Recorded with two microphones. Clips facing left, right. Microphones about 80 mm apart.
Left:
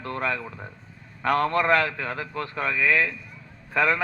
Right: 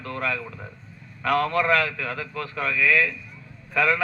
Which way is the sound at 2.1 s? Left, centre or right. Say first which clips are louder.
Even; left.